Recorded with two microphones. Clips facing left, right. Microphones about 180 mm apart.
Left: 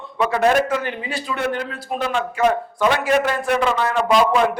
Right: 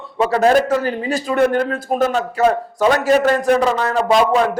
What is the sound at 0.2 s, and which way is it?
A man's voice, 35° right (ahead or behind).